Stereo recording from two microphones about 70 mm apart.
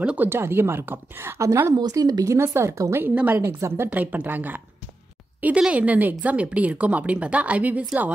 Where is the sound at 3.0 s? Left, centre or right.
Right.